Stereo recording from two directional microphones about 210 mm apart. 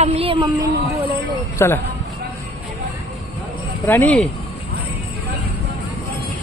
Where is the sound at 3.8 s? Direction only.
10° left (ahead or behind).